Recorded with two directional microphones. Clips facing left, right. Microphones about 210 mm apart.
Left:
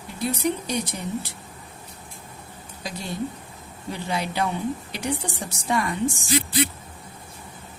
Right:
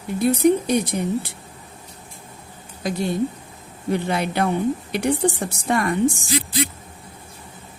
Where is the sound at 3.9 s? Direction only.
55° right (ahead or behind).